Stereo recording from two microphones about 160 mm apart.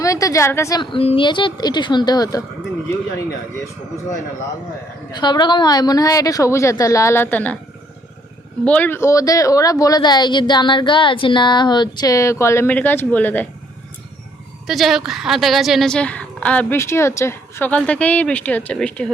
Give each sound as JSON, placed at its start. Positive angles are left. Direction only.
{"t": 0.0, "sound": "a woman's voice", "side_deg": 20}
{"t": 0.8, "sound": "speech", "side_deg": 35}
{"t": 5.1, "sound": "speech", "side_deg": 25}
{"t": 8.6, "sound": "speech", "side_deg": 10}
{"t": 14.7, "sound": "a woman's voice", "side_deg": 0}